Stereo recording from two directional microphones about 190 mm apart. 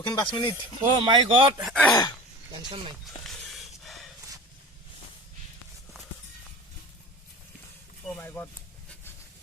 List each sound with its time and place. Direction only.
0.0 s speech: 20° left (ahead or behind)
1.0 s speech: 25° right (ahead or behind)
1.6 s speech: 5° left (ahead or behind)
1.9 s speech: 20° left (ahead or behind)
2.5 s speech: 25° right (ahead or behind)
3.2 s snort: centre (ahead or behind)
8.0 s a sound: 10° left (ahead or behind)